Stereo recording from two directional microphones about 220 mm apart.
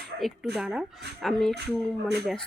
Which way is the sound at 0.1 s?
50° right (ahead or behind).